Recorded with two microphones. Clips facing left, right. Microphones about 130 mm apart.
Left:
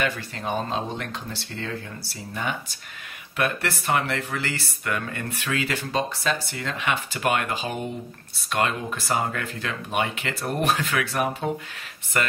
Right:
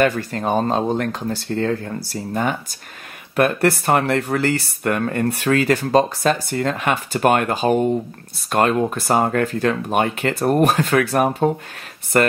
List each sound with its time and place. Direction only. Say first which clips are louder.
0.0 s speech: right 9 dB; 45° right (ahead or behind)